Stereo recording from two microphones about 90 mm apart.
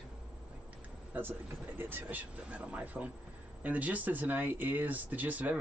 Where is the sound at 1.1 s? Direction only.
25° right (ahead or behind).